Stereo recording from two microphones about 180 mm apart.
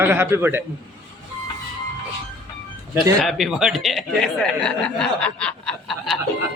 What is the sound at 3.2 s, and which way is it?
Speech, centre (ahead or behind).